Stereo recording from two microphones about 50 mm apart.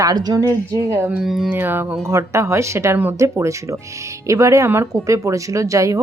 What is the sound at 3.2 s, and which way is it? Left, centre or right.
Speech, right.